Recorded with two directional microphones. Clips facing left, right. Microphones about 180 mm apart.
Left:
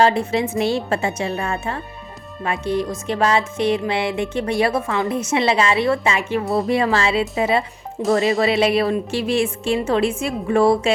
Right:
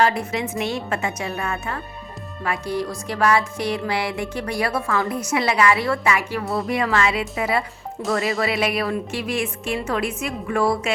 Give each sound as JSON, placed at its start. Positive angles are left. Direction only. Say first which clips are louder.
{"t": 0.0, "sound": "music", "louder": "left 4 dB", "side_deg": 30}